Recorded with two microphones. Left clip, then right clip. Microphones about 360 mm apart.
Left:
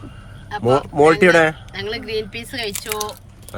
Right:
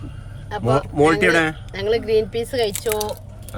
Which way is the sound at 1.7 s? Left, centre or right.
Centre.